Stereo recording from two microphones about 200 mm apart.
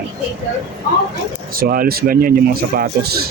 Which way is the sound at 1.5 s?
45° right (ahead or behind).